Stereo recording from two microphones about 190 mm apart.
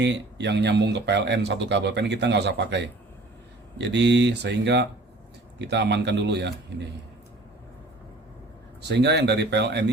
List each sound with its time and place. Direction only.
0.0 s speech: 65° right (ahead or behind)
8.8 s speech: 65° right (ahead or behind)